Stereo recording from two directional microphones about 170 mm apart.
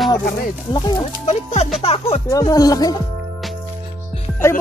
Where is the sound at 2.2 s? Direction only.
20° left (ahead or behind).